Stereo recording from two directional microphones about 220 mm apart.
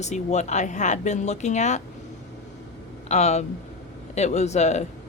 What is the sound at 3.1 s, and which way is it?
Speech, 30° left (ahead or behind).